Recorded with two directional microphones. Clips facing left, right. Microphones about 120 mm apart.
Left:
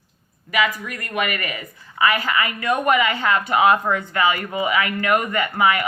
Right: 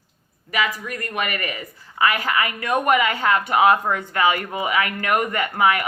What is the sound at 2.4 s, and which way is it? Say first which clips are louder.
Speech: even; 50° right (ahead or behind).